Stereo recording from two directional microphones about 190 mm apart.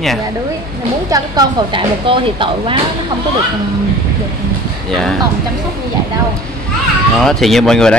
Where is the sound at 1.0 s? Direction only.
20° right (ahead or behind).